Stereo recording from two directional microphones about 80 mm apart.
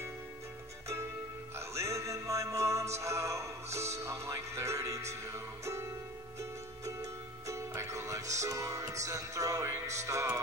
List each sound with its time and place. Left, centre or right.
1.7 s music: right